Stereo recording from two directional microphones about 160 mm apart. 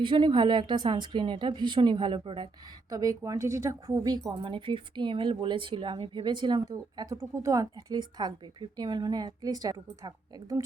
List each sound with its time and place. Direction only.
0.0 s speech: 30° right (ahead or behind)